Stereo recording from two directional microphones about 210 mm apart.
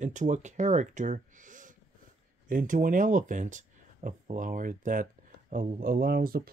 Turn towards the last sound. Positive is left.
turn(degrees=-45)  # may be behind; listen again after turning